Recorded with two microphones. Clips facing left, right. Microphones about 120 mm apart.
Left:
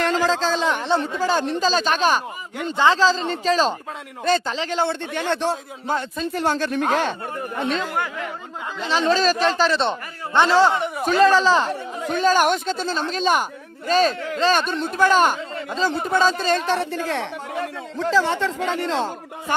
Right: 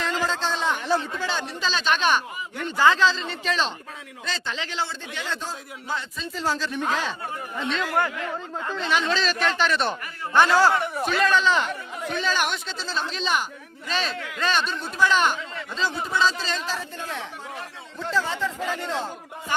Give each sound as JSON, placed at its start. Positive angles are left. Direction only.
{"t": 0.2, "sound": "a man's voice", "side_deg": 90}
{"t": 1.2, "sound": "speech", "side_deg": 45}
{"t": 2.7, "sound": "a woman's voice", "side_deg": 25}
{"t": 3.0, "sound": "speech", "side_deg": 35}
{"t": 4.3, "sound": "speech", "side_deg": 50}
{"t": 5.3, "sound": "speech", "side_deg": 70}
{"t": 5.9, "sound": "a man's voice", "side_deg": 50}
{"t": 8.9, "sound": "speech", "side_deg": 35}
{"t": 11.0, "sound": "speech", "side_deg": 35}
{"t": 15.9, "sound": "speech", "side_deg": 55}